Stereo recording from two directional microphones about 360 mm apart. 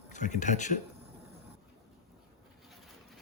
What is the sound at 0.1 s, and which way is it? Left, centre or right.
Speech, centre.